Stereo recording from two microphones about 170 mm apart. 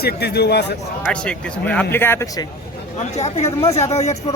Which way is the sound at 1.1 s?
5° left (ahead or behind).